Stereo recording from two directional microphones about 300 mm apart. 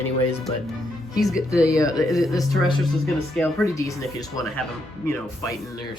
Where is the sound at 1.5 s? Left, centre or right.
Centre.